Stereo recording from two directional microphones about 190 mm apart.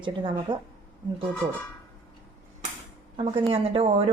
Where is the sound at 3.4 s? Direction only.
30° right (ahead or behind).